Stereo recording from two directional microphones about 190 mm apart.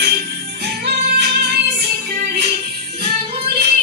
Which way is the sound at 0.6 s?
65° right (ahead or behind).